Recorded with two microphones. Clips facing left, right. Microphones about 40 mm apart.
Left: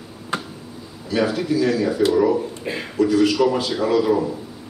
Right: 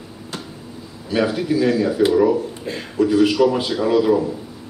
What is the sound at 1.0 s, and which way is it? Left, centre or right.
A man's voice, centre.